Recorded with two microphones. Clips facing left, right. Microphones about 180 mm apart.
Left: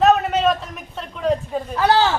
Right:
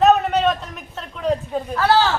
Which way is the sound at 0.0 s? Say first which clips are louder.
Even; centre (ahead or behind).